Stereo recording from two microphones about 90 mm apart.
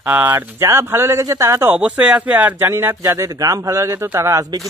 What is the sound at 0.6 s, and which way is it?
Speech, 30° right (ahead or behind).